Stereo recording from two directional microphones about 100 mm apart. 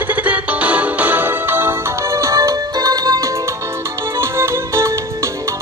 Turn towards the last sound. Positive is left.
turn(degrees=-30)  # may be behind; listen again after turning